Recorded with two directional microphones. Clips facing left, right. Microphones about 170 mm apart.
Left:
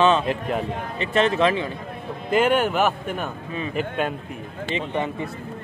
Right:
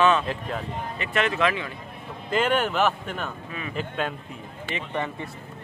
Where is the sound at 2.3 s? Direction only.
10° left (ahead or behind).